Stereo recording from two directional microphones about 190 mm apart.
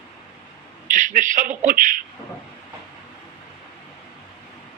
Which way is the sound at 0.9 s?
40° right (ahead or behind).